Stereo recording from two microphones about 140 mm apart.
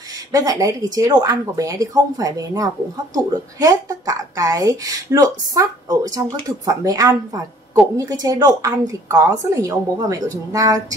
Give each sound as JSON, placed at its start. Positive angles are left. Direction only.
{"t": 0.3, "sound": "a woman's voice", "side_deg": -25}